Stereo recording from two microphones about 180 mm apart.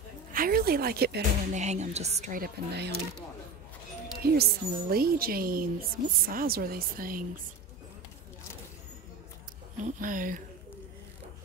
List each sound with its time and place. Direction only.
0.3 s speech: 55° right (ahead or behind)
1.5 s a woman's voice: 40° right (ahead or behind); by 2.9 s 60° right (ahead or behind)
4.4 s a woman's voice: 55° right (ahead or behind)
9.9 s speech: 50° right (ahead or behind)